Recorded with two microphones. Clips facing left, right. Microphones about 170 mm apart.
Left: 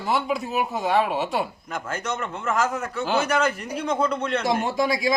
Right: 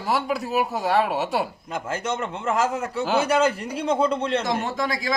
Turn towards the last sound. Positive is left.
turn(degrees=15)  # may be behind; listen again after turning